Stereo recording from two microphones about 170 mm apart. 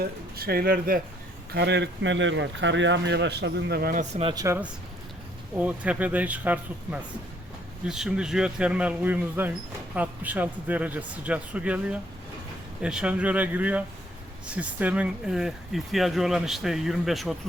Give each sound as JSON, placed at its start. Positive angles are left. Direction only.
{"t": 0.0, "sound": "speech", "side_deg": -60}
{"t": 1.5, "sound": "speech", "side_deg": -85}
{"t": 4.1, "sound": "speech", "side_deg": -35}
{"t": 4.4, "sound": "a man's voice", "side_deg": -15}